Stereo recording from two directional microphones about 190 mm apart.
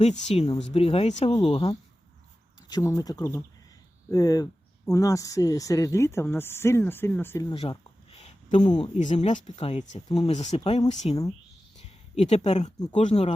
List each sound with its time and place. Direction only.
0.3 s speech: 30° left (ahead or behind)
2.6 s speech: 20° left (ahead or behind)
7.5 s a sound: 30° left (ahead or behind)
8.6 s speech: 20° left (ahead or behind)
9.0 s speech: 40° left (ahead or behind)
12.1 s speech: 35° left (ahead or behind)